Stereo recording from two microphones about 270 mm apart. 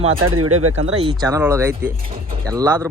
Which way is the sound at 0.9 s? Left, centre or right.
Centre.